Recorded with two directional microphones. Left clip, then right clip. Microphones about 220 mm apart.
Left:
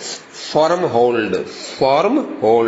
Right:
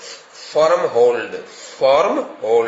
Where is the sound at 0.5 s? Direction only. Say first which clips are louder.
Even; 15° left (ahead or behind).